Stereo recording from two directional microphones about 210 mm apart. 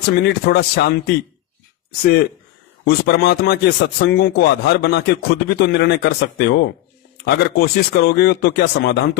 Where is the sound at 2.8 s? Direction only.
50° left (ahead or behind).